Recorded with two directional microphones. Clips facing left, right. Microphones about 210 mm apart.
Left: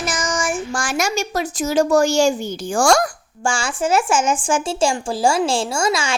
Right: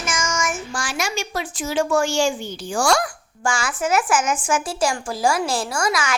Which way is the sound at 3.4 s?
30° left (ahead or behind).